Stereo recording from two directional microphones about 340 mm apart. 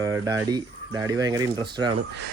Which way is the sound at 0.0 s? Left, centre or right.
Centre.